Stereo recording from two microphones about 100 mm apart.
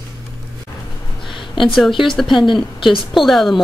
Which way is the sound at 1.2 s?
55° left (ahead or behind).